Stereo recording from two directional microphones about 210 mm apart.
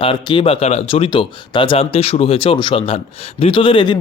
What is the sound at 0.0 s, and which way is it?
Speech, 25° left (ahead or behind).